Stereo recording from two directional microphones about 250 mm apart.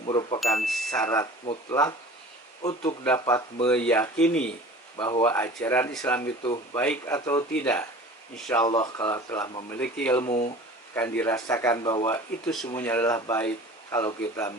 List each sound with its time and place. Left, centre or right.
0.0 s speech: centre
0.6 s speech: centre
0.9 s speech: centre
3.0 s speech: centre
4.9 s speech: centre
5.2 s speech: centre
8.6 s speech: centre
10.2 s speech: left
10.9 s speech: centre